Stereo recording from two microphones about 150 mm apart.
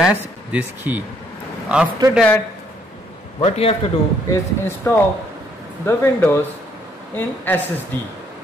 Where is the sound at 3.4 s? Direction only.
45° left (ahead or behind).